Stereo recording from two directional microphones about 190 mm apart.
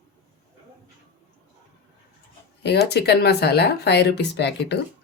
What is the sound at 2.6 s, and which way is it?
Speech, 60° left (ahead or behind).